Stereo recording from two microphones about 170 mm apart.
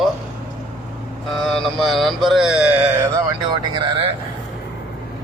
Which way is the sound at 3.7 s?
30° right (ahead or behind).